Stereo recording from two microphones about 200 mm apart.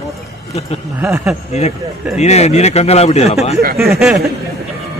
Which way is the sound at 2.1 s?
35° left (ahead or behind).